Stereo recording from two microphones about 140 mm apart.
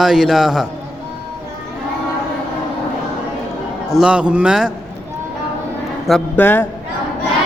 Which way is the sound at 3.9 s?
10° right (ahead or behind).